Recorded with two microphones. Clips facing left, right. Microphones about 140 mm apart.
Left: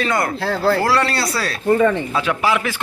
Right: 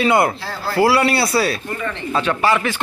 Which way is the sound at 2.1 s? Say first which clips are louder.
Right 1 dB; 10° left (ahead or behind).